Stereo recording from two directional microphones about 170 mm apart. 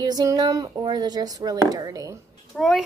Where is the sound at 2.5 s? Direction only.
Centre (ahead or behind).